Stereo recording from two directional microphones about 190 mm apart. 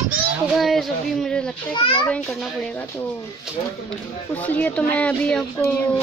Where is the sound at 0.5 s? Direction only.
Centre (ahead or behind).